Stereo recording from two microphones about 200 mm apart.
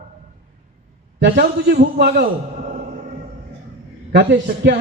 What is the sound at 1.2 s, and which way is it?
A man's voice, 55° right (ahead or behind).